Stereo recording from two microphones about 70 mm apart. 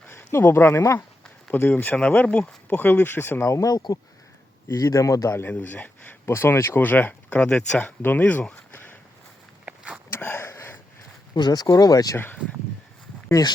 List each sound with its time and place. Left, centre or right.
0.1 s speech: left
1.7 s speech: left
3.5 s speech: left
4.8 s speech: left
5.5 s speech: left
8.0 s speech: left
10.1 s a sound: left
11.3 s speech: left
12.1 s speech: left
13.4 s speech: left